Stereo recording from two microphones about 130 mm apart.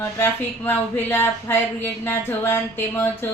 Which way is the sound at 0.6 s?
15° left (ahead or behind).